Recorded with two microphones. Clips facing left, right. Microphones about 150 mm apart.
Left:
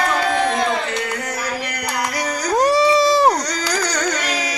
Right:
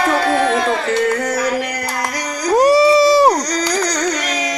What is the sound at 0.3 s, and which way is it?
Tabla, 40° right (ahead or behind).